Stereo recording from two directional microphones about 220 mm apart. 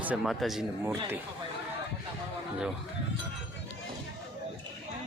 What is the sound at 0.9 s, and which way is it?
Speech, 15° right (ahead or behind).